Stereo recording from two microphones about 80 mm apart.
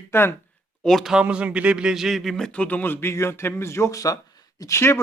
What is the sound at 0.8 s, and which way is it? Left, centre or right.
Speech, centre.